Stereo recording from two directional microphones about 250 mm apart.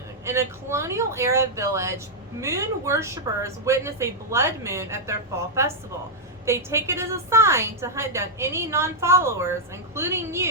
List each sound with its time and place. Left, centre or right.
0.3 s speech: centre